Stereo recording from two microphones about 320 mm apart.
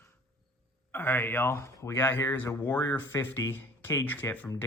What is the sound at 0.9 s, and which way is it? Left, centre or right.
Speech, centre.